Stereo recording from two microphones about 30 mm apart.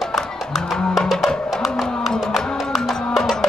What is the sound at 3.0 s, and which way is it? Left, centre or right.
Music, centre.